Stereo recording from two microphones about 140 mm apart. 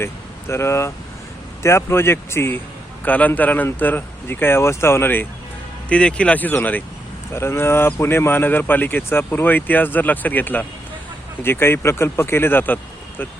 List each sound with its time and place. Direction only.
0.0 s speech: 20° left (ahead or behind)